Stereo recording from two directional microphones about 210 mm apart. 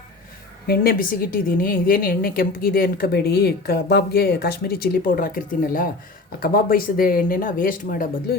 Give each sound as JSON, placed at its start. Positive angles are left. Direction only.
{"t": 0.7, "sound": "a woman's voice", "side_deg": 45}